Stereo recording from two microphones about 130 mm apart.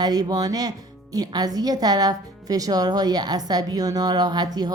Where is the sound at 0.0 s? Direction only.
30° right (ahead or behind).